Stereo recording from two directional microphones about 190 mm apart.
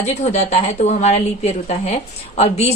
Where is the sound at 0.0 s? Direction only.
35° left (ahead or behind).